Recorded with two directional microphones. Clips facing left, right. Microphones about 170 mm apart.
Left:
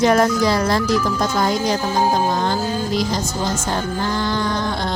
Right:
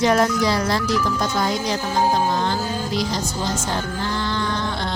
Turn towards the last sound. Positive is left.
turn(degrees=40)  # may be behind; listen again after turning